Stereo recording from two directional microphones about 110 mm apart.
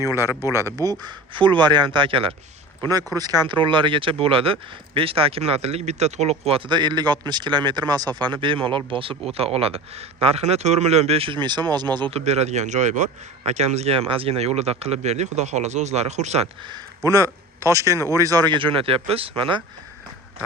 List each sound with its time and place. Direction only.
0.0 s speech: 30° left (ahead or behind)
0.8 s speech: 35° right (ahead or behind)
1.3 s speech: 50° right (ahead or behind)
2.9 s speech: 35° right (ahead or behind)
3.5 s speech: 50° right (ahead or behind); by 6.6 s 70° right (ahead or behind)
6.7 s speech: 45° right (ahead or behind)
12.1 s speech: 80° right
13.5 s speech: 80° right
16.6 s speech: 35° right (ahead or behind)
17.9 s speech: 25° left (ahead or behind)
18.2 s speech: 35° right (ahead or behind); by 19.6 s 55° right (ahead or behind)